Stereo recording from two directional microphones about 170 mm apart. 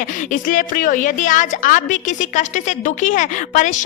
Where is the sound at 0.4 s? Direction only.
50° left (ahead or behind).